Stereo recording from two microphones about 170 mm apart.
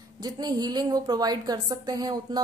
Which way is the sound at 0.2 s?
25° right (ahead or behind).